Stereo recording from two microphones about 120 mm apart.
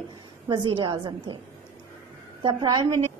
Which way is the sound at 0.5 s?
45° right (ahead or behind).